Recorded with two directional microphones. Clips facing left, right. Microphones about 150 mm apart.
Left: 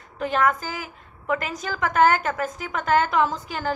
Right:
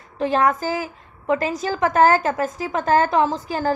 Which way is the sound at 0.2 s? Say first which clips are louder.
Right 3 dB; 30° right (ahead or behind).